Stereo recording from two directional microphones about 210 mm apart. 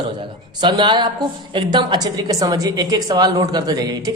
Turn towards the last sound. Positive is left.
turn(degrees=-15)  # may be behind; listen again after turning